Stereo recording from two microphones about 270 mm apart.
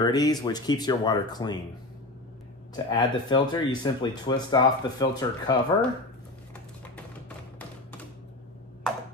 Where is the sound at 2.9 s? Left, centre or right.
Centre.